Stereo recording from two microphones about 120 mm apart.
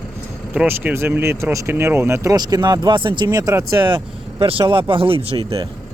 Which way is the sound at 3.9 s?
50° right (ahead or behind).